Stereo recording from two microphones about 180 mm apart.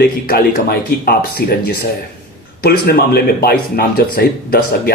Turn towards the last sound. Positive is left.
turn(degrees=55)  # may be behind; listen again after turning